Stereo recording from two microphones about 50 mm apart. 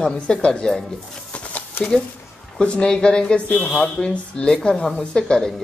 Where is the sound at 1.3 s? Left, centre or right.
Left.